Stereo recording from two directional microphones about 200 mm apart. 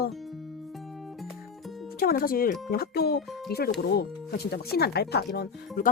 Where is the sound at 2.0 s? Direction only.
45° left (ahead or behind).